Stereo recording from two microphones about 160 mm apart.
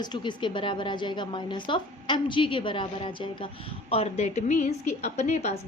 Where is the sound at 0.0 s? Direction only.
30° left (ahead or behind).